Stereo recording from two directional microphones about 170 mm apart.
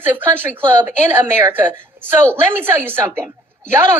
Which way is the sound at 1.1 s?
10° right (ahead or behind).